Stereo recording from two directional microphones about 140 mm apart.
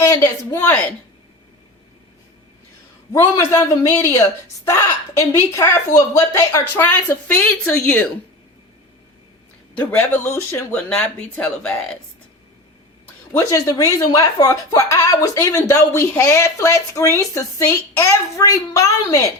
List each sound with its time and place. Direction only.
0.0 s speech: 20° left (ahead or behind)
3.2 s a woman's voice: 20° left (ahead or behind); by 8.0 s 5° left (ahead or behind)
10.5 s a woman's voice: 10° left (ahead or behind)
13.3 s speech: 25° left (ahead or behind)